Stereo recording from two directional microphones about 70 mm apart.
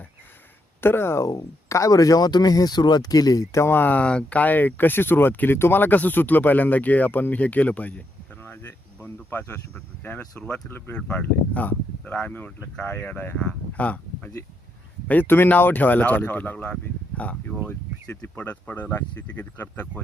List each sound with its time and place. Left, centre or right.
0.8 s speech: left
3.5 s speech: left
13.3 s speech: centre